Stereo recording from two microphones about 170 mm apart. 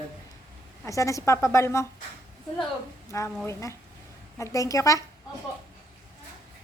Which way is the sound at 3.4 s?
15° left (ahead or behind).